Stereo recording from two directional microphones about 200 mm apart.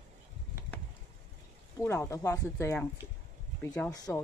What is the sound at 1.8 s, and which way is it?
Speech, 15° left (ahead or behind).